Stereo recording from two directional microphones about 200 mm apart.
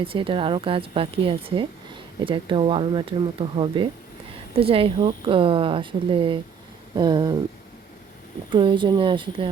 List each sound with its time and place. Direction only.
0.0 s a woman's voice: 25° right (ahead or behind)
8.4 s a woman's voice: 25° right (ahead or behind)